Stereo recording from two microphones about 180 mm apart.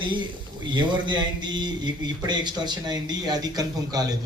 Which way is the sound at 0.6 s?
25° right (ahead or behind).